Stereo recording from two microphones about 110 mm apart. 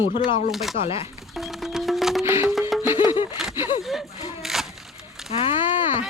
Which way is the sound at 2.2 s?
20° right (ahead or behind).